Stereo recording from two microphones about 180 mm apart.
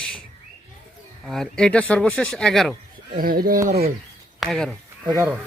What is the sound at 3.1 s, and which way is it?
Speech, 55° right (ahead or behind).